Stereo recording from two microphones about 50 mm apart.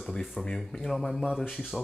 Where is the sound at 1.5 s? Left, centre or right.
Centre.